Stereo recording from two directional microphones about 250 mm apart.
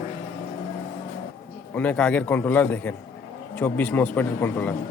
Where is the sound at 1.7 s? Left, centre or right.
Centre.